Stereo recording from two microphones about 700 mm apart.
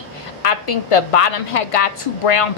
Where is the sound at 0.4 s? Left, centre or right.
Left.